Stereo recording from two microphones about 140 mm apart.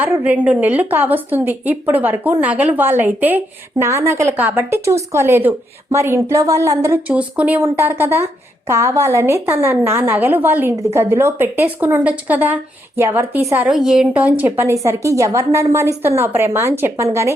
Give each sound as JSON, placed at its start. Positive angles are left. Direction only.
{"t": 0.0, "sound": "a woman's voice", "side_deg": -10}
{"t": 13.7, "sound": "a woman's voice", "side_deg": -5}